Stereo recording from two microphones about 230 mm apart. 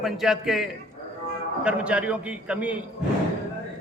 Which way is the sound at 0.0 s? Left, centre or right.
Centre.